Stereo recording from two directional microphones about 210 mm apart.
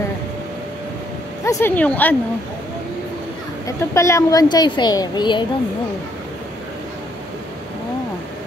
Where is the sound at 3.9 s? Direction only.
15° left (ahead or behind).